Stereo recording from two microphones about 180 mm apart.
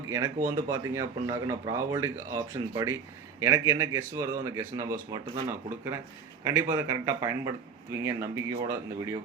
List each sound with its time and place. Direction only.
0.5 s speech: 15° right (ahead or behind)